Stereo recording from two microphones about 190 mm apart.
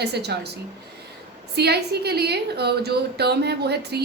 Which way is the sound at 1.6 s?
60° right (ahead or behind).